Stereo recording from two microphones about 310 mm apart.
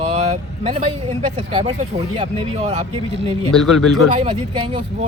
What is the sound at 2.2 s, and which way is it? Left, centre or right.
Speech, centre.